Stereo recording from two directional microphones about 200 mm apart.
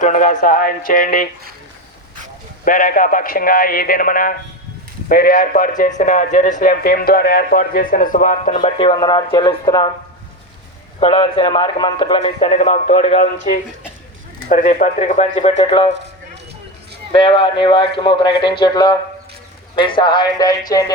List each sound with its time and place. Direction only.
0.0 s speech: 40° left (ahead or behind)
2.6 s speech: 45° left (ahead or behind); by 9.9 s 20° left (ahead or behind)
11.0 s a man's voice: 30° left (ahead or behind)
17.1 s a man's voice: 25° left (ahead or behind)